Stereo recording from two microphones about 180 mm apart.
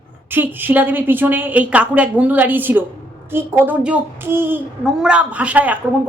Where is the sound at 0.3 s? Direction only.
10° right (ahead or behind).